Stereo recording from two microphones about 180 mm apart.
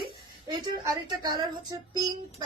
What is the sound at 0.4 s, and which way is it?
Speech, 25° right (ahead or behind).